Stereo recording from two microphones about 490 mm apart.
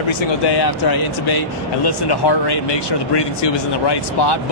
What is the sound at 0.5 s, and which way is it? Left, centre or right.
Speech, left.